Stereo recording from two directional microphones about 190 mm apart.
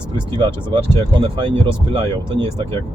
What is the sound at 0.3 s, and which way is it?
Speech, 25° right (ahead or behind).